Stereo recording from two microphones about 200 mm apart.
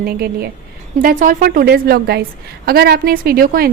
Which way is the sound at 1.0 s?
40° right (ahead or behind).